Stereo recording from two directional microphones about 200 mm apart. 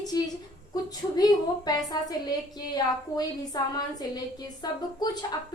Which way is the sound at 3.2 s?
20° left (ahead or behind).